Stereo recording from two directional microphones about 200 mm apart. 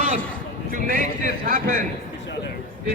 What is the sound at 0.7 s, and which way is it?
Speech, 45° right (ahead or behind).